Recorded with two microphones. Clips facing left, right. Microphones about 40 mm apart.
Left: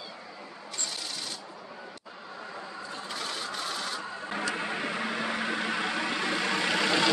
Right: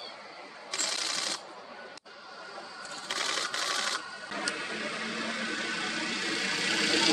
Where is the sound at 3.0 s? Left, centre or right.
Right.